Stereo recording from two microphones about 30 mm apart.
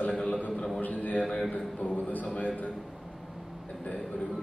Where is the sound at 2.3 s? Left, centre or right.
Left.